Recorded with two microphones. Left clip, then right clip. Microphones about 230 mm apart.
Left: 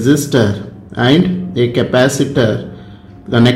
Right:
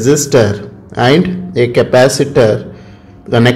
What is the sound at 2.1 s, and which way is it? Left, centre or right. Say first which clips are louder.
Speech: right 3 dB; centre.